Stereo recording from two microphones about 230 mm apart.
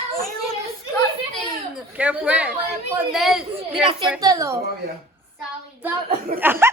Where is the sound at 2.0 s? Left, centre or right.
Centre.